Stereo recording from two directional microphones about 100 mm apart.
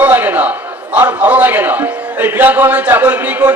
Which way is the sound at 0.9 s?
20° right (ahead or behind).